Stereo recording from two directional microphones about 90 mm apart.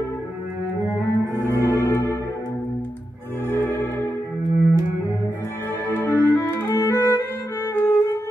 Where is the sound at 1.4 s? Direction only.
25° left (ahead or behind).